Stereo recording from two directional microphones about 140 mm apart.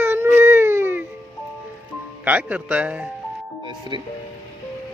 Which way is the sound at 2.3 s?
10° right (ahead or behind).